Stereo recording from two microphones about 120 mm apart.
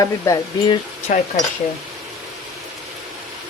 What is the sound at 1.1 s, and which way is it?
Speech, 90° left.